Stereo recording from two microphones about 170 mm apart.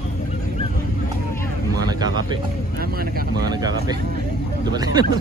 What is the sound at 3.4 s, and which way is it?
Vehicle, 25° right (ahead or behind).